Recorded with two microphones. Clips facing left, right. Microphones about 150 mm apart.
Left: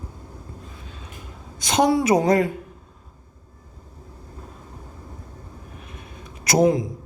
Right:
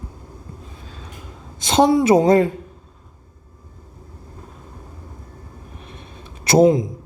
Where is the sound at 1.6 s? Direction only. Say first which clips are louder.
Right 4 dB; 25° right (ahead or behind).